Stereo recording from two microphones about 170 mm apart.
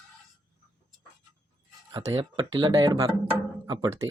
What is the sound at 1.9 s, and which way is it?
Speech, 20° right (ahead or behind).